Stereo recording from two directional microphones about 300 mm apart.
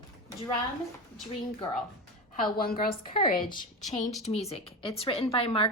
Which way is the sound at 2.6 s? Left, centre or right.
Left.